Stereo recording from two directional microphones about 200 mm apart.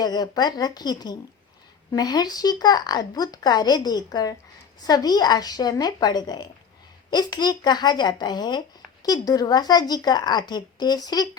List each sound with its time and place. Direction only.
0.0 s speech: 20° left (ahead or behind)